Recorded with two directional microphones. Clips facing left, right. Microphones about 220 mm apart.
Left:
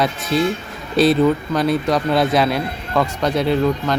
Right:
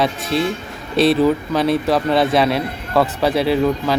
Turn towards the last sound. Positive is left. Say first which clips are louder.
# right 1 dB
turn(degrees=-5)  # may be behind; listen again after turning